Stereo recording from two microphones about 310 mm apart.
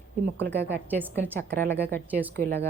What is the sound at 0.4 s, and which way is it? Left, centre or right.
Speech, right.